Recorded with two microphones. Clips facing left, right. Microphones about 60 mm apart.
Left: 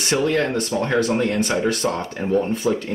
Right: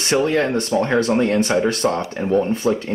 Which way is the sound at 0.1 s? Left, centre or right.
Right.